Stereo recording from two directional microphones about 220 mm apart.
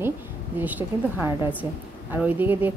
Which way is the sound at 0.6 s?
5° right (ahead or behind).